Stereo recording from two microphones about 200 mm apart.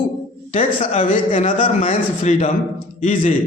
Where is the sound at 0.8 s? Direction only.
40° left (ahead or behind).